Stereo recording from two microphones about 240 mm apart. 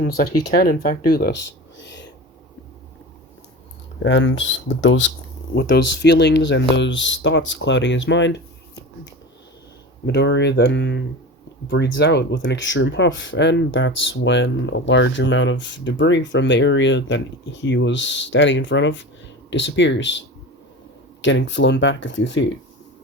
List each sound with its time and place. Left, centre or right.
0.0 s speech: left
4.0 s speech: left
10.1 s speech: left